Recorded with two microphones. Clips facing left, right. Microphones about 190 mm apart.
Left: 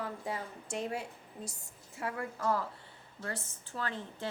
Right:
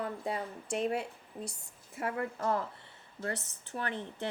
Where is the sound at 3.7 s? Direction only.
20° right (ahead or behind).